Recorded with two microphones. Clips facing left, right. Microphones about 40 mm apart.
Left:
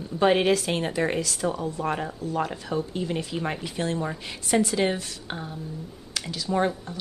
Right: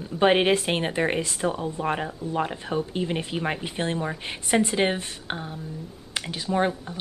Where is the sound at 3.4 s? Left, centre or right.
Centre.